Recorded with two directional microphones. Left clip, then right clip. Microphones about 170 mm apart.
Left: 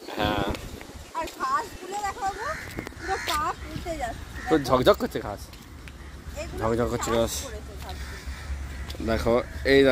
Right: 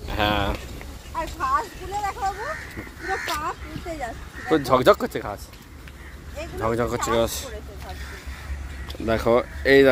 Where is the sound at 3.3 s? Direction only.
20° right (ahead or behind).